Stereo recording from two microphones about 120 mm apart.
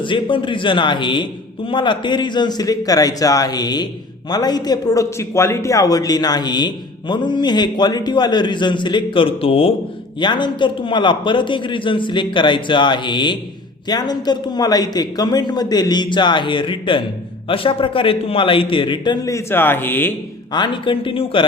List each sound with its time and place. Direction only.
0.0 s a man's voice: 45° left (ahead or behind)
10.2 s a man's voice: 40° left (ahead or behind)
19.3 s speech: 20° left (ahead or behind)
20.5 s a man's voice: 40° left (ahead or behind)